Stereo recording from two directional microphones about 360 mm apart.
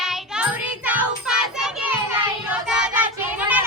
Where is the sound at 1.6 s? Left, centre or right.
Centre.